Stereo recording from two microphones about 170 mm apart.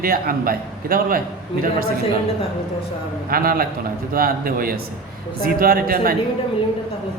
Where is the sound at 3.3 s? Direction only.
60° right (ahead or behind).